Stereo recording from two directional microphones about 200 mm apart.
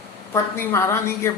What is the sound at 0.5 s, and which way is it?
Speech, 10° left (ahead or behind).